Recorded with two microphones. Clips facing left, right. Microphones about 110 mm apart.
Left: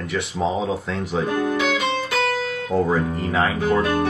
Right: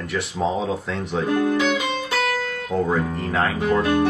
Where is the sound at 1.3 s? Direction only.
20° left (ahead or behind).